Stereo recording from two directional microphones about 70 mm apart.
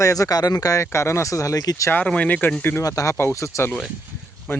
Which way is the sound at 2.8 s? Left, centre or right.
Left.